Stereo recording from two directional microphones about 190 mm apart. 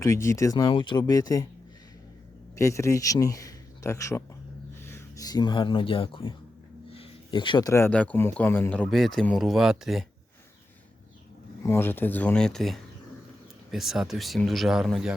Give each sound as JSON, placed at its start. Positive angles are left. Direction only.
{"t": 0.0, "sound": "speech", "side_deg": 15}
{"t": 2.6, "sound": "a man's voice", "side_deg": 15}
{"t": 11.6, "sound": "speech", "side_deg": 15}